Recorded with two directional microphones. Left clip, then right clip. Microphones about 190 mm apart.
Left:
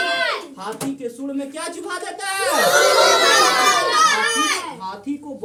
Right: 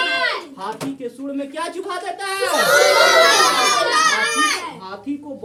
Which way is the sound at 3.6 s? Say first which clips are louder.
Left 1 dB; 60° right (ahead or behind).